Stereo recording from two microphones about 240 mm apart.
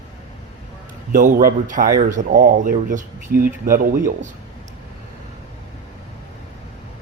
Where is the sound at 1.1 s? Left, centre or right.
Right.